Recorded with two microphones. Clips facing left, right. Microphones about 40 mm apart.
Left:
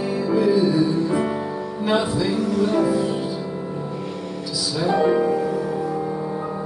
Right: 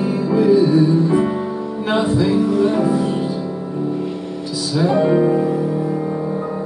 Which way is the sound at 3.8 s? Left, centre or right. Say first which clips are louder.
Right 6 dB; centre.